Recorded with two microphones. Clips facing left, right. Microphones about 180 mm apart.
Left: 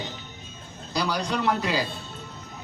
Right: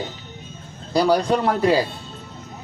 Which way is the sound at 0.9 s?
50° right (ahead or behind).